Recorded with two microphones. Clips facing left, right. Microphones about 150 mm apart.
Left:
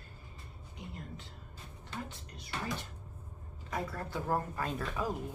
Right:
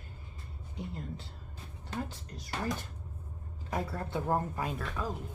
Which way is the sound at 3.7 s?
25° right (ahead or behind).